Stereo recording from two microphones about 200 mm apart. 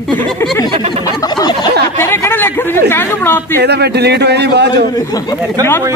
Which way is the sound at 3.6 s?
55° right (ahead or behind).